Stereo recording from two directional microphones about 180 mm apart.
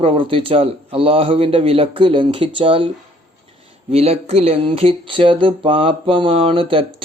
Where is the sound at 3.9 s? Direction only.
35° right (ahead or behind).